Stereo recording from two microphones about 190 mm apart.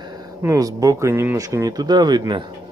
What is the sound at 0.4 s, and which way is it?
Speech, 15° right (ahead or behind).